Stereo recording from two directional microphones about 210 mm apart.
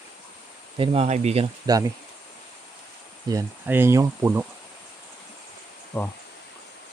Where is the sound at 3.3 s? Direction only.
10° right (ahead or behind).